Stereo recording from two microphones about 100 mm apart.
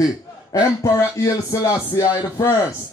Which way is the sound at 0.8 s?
30° left (ahead or behind).